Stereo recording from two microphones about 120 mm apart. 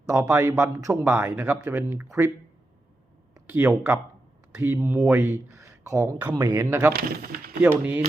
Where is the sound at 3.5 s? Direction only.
15° right (ahead or behind).